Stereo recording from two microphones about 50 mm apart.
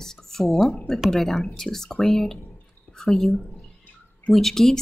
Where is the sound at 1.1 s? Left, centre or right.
Centre.